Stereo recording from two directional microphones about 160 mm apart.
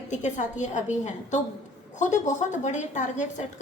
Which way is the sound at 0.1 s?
50° left (ahead or behind).